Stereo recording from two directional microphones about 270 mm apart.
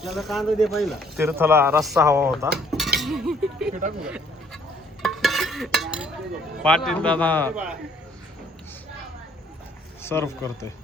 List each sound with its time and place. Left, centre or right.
0.0 s speech: centre
2.6 s chink: centre
3.0 s speech: centre
3.7 s speech: right
4.0 s a sound: centre
5.0 s stir: centre
6.6 s speech: centre
7.5 s speech: centre
10.0 s speech: centre